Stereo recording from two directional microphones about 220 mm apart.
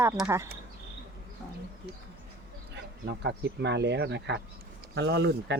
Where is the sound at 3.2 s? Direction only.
50° right (ahead or behind).